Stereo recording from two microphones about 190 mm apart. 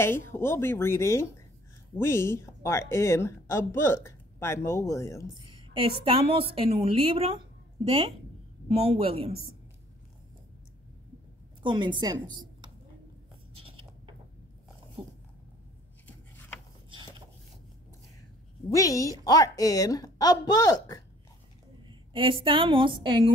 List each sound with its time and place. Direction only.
0.0 s a woman's voice: 10° left (ahead or behind)
5.3 s a woman's voice: 25° right (ahead or behind)
8.6 s speech: 30° right (ahead or behind)
11.6 s a woman's voice: 25° right (ahead or behind)
13.6 s a sound: 30° right (ahead or behind)
18.7 s a woman's voice: 15° left (ahead or behind)
21.8 s a woman's voice: 25° right (ahead or behind)